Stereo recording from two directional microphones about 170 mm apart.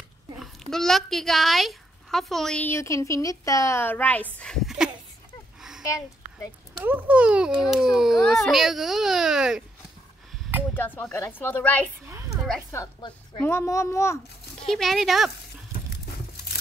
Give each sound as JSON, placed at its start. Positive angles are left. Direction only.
{"t": 0.4, "sound": "a child's voice", "side_deg": 0}
{"t": 5.6, "sound": "a sound", "side_deg": -5}
{"t": 5.9, "sound": "a woman's voice", "side_deg": 20}
{"t": 6.8, "sound": "a child's voice", "side_deg": -10}
{"t": 10.8, "sound": "a child's voice", "side_deg": 10}
{"t": 12.4, "sound": "a sound", "side_deg": 0}
{"t": 12.7, "sound": "a woman's voice", "side_deg": 20}
{"t": 14.7, "sound": "a child's voice", "side_deg": 0}